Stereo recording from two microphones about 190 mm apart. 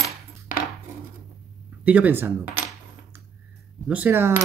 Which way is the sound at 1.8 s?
10° right (ahead or behind).